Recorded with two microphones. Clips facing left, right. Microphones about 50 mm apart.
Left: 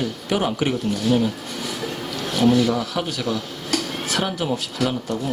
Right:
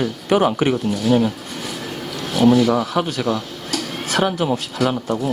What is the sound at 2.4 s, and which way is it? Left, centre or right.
Speech, right.